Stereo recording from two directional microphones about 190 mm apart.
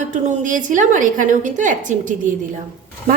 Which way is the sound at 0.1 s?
40° right (ahead or behind).